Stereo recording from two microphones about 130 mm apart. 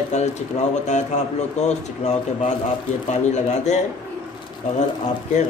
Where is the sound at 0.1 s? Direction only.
60° left (ahead or behind).